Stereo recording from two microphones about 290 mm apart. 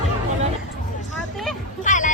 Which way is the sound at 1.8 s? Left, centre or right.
Left.